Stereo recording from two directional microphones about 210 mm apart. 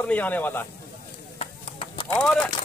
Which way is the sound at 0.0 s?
5° left (ahead or behind).